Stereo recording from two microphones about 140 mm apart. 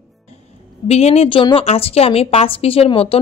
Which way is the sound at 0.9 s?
50° left (ahead or behind).